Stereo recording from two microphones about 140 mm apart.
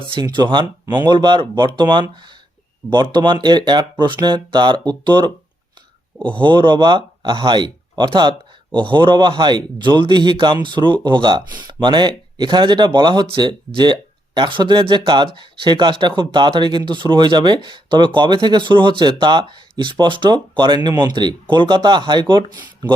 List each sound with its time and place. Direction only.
0.1 s speech: 35° right (ahead or behind)
6.3 s speech: 35° right (ahead or behind)